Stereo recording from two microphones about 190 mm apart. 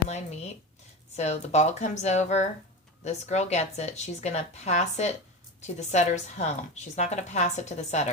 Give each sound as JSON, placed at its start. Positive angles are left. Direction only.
{"t": 1.1, "sound": "speech", "side_deg": 35}